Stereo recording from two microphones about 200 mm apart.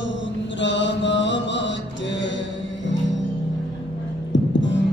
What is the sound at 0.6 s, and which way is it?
Mantra, 65° left (ahead or behind).